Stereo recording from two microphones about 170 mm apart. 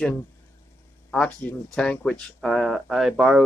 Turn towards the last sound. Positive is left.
turn(degrees=0)  # may be behind; listen again after turning